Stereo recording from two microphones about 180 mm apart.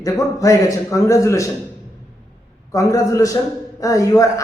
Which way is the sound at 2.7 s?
15° left (ahead or behind).